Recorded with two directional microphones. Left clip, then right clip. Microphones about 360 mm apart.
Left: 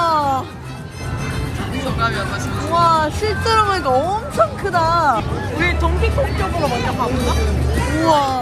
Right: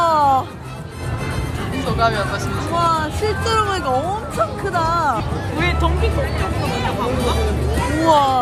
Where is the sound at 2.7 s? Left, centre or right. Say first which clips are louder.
Left 4 dB; centre.